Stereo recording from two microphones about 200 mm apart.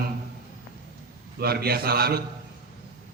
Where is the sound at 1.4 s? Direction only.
50° right (ahead or behind).